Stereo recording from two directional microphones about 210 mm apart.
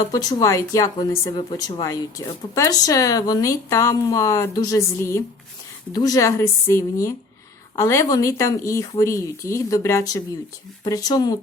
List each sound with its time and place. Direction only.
0.0 s speech: 20° left (ahead or behind)